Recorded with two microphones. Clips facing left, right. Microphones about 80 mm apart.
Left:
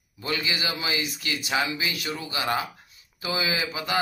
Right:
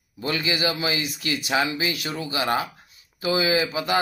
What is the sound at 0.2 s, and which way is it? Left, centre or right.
Speech, right.